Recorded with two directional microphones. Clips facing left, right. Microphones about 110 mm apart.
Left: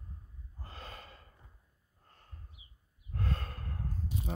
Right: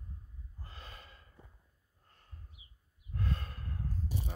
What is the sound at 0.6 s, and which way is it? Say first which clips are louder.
Gasp: left 5 dB; 40° left (ahead or behind).